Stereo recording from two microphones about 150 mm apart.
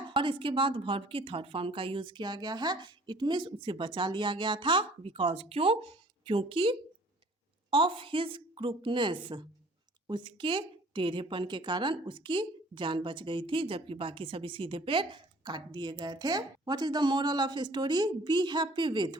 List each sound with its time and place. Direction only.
0.1 s a woman's voice: 35° right (ahead or behind)